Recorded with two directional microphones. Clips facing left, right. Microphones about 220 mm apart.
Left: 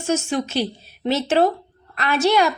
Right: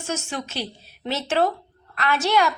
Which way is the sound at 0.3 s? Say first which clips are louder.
Left 8 dB; 15° left (ahead or behind).